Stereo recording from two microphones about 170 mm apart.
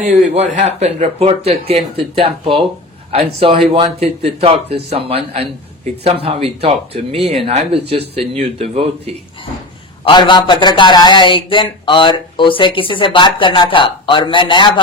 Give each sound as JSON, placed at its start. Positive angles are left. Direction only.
{"t": 0.0, "sound": "speech", "side_deg": -45}
{"t": 3.7, "sound": "speech", "side_deg": -35}
{"t": 10.0, "sound": "a man's voice", "side_deg": 30}